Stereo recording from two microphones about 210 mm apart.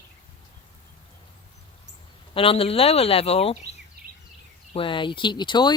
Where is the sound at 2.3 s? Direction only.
25° left (ahead or behind).